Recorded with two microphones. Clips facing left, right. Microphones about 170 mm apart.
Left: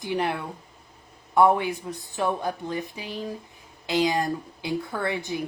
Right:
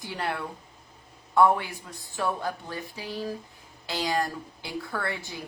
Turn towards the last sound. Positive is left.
turn(degrees=20)  # may be behind; listen again after turning